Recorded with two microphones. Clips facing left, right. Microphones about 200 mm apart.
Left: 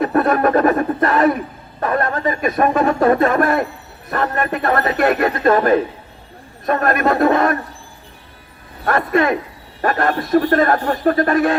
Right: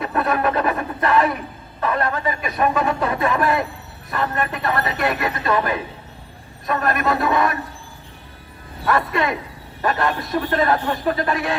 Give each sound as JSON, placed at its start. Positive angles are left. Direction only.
{"t": 0.0, "sound": "speech", "side_deg": 45}
{"t": 8.8, "sound": "speech", "side_deg": 50}